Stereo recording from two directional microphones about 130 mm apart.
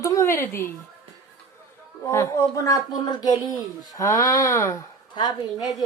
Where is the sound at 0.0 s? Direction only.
25° left (ahead or behind).